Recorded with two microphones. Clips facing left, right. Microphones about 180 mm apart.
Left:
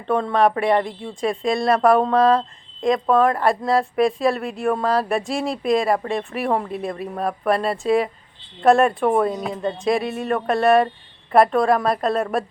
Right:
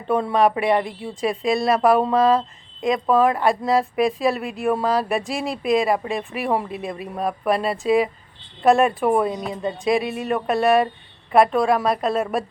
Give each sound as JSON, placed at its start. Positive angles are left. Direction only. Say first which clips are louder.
{"t": 0.1, "sound": "a woman's voice", "louder": "even", "side_deg": -5}